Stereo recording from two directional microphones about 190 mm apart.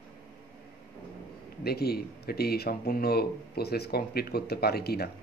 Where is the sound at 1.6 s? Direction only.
55° left (ahead or behind).